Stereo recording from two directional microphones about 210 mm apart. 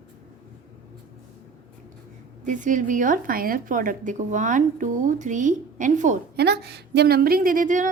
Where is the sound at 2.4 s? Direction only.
35° right (ahead or behind).